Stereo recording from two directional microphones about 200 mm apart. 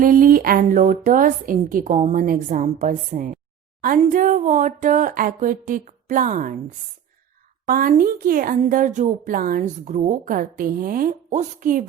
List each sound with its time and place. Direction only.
0.0 s a woman's voice: 45° right (ahead or behind)